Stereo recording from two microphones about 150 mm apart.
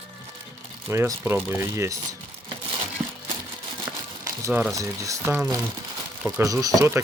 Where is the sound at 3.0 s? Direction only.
45° right (ahead or behind).